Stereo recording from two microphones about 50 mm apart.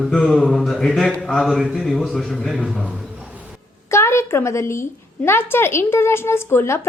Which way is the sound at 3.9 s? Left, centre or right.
Left.